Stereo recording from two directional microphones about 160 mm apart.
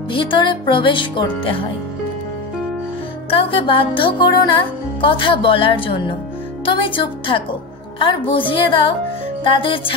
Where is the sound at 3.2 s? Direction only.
35° left (ahead or behind).